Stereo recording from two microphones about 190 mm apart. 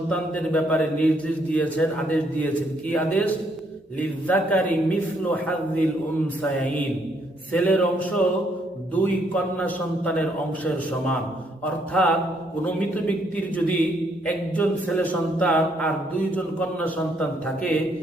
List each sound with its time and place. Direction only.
0.1 s a man's voice: 5° left (ahead or behind)
9.3 s a man's voice: 5° left (ahead or behind)
11.6 s a man's voice: 5° left (ahead or behind)